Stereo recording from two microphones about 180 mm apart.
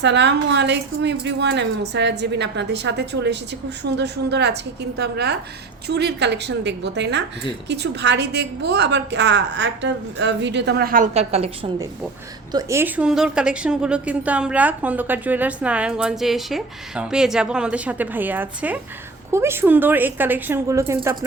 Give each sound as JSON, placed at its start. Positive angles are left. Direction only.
{"t": 0.0, "sound": "a woman's voice", "side_deg": -75}
{"t": 12.5, "sound": "a woman's voice", "side_deg": -20}